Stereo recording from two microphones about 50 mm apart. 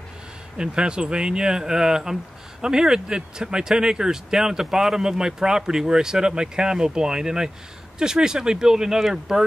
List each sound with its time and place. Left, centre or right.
0.6 s speech: centre